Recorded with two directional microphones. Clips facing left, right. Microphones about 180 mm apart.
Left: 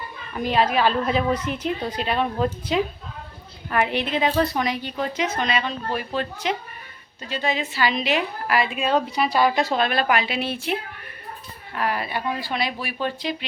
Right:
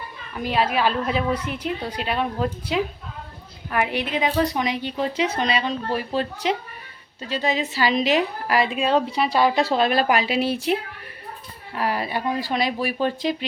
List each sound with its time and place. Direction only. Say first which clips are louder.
0.3 s a woman's voice: left 1 dB; 5° right (ahead or behind); by 13.3 s 40° right (ahead or behind)